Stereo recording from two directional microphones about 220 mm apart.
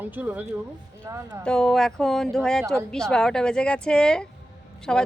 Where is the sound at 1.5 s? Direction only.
Centre (ahead or behind).